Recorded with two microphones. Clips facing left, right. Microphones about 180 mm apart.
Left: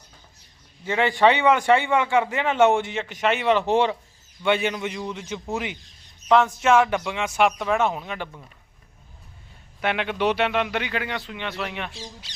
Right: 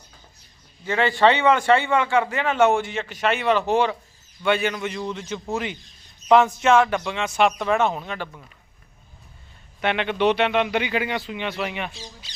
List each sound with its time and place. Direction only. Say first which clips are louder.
0.9 s a man's voice: even; 15° left (ahead or behind)
6.2 s speech: right 2 dB; 5° right (ahead or behind); by 8.4 s 15° left (ahead or behind)
9.8 s speech: right 2 dB; 5° left (ahead or behind)